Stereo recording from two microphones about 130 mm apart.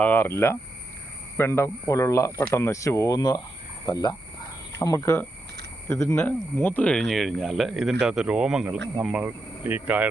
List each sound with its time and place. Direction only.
0.0 s speech: 15° left (ahead or behind); by 10.1 s 15° right (ahead or behind)